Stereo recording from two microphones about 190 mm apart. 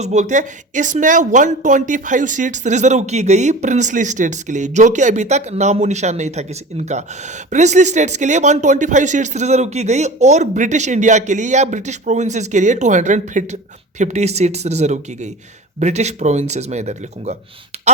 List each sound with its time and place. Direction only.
0.0 s speech: 40° right (ahead or behind)